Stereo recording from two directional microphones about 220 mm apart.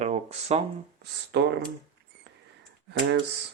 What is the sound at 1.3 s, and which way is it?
Speech, 50° right (ahead or behind).